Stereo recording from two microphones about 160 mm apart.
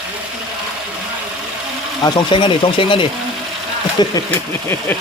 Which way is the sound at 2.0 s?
30° left (ahead or behind).